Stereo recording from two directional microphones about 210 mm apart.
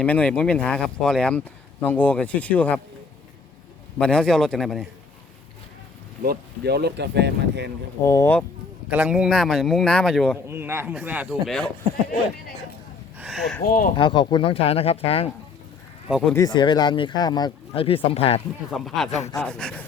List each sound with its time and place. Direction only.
0.0 s a man's voice: 5° left (ahead or behind)
3.9 s a man's voice: 5° left (ahead or behind)
6.2 s speech: 50° right (ahead or behind)
8.0 s speech: 15° left (ahead or behind)
8.9 s a man's voice: 5° right (ahead or behind)
10.3 s a man's voice: 10° right (ahead or behind)
13.1 s a sound: 5° right (ahead or behind)
13.7 s speech: 40° left (ahead or behind)
13.9 s speech: 20° left (ahead or behind)
16.0 s speech: centre (ahead or behind)
16.3 s speech: 20° left (ahead or behind)
18.7 s a man's voice: centre (ahead or behind)